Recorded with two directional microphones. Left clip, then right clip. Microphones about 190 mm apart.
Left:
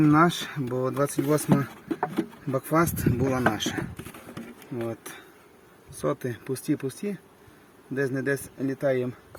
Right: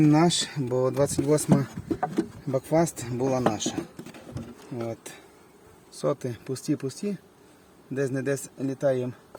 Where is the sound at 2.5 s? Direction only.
10° right (ahead or behind).